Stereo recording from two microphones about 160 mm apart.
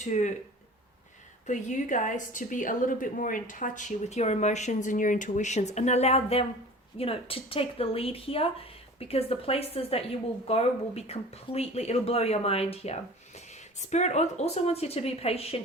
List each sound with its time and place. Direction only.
0.0 s a woman's voice: 50° left (ahead or behind)
1.5 s a woman's voice: 50° left (ahead or behind)